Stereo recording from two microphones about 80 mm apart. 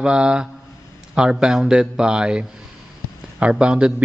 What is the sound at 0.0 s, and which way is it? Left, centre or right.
A man's voice, centre.